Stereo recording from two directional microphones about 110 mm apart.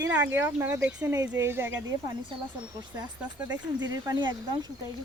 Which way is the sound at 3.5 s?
35° right (ahead or behind).